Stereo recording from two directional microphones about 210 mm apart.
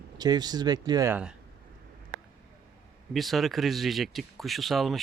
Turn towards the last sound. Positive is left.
turn(degrees=0)  # may be behind; listen again after turning